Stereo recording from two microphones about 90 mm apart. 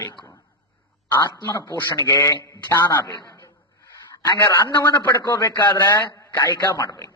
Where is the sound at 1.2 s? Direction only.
45° left (ahead or behind).